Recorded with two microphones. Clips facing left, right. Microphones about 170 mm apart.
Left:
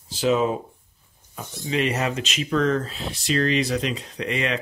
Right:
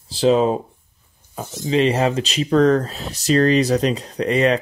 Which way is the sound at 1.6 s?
30° right (ahead or behind).